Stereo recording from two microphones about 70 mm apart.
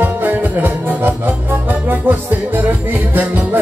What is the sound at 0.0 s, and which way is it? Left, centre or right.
Music, right.